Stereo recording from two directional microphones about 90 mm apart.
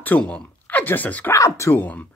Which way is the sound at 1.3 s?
35° left (ahead or behind).